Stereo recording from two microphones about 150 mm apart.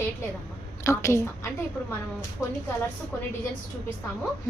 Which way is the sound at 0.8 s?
20° left (ahead or behind).